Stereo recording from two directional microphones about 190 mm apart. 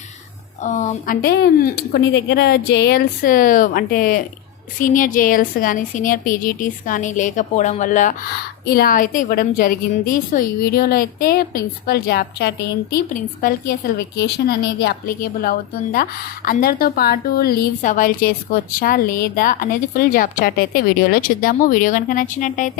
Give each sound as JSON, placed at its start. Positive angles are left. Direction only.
{"t": 0.6, "sound": "a woman's voice", "side_deg": 40}
{"t": 8.6, "sound": "a woman's voice", "side_deg": 55}